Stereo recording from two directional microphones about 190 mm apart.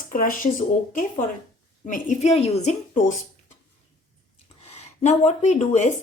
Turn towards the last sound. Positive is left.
turn(degrees=40)  # may be behind; listen again after turning